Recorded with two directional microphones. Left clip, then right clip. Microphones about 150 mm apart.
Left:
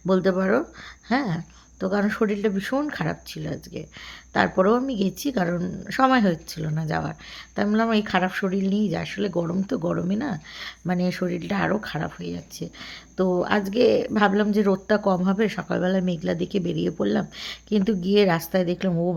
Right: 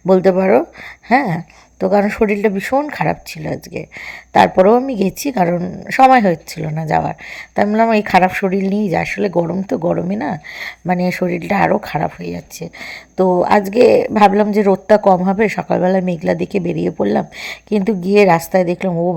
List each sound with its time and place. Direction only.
0.1 s a woman's voice: 30° right (ahead or behind)
18.9 s a woman's voice: 10° right (ahead or behind)